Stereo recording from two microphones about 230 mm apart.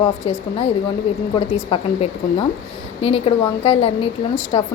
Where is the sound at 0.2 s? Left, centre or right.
Left.